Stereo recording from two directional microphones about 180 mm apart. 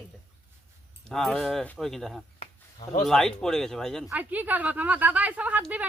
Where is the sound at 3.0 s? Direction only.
Centre (ahead or behind).